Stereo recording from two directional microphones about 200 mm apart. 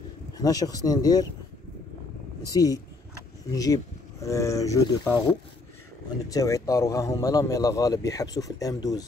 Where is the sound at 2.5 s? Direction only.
20° left (ahead or behind).